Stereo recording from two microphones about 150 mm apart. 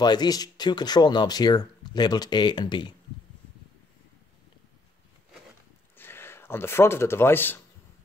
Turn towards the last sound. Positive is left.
turn(degrees=15)  # may be behind; listen again after turning